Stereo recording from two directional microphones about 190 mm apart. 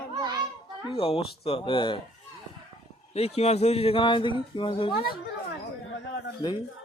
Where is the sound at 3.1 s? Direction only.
30° left (ahead or behind).